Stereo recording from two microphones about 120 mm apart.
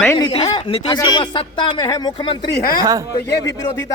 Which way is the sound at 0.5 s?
35° left (ahead or behind).